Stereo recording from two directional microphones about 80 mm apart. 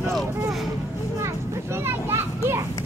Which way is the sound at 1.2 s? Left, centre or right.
Right.